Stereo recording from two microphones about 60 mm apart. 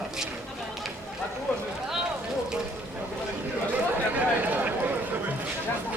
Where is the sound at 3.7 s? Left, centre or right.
Right.